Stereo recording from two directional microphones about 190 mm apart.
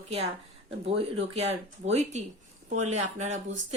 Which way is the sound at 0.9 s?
35° right (ahead or behind).